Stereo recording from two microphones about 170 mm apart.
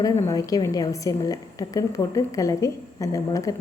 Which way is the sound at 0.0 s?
20° left (ahead or behind).